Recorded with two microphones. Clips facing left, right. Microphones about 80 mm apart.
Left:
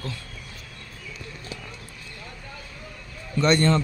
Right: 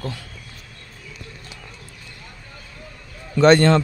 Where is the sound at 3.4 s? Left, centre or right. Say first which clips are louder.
Right 7 dB; right.